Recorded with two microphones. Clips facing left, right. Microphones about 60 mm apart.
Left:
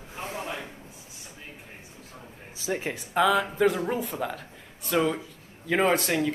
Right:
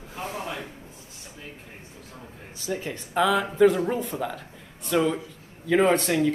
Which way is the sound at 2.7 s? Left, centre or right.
Left.